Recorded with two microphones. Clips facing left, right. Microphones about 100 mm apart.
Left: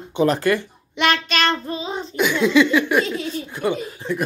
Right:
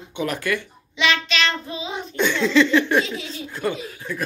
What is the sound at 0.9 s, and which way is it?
Child singing, 50° left (ahead or behind).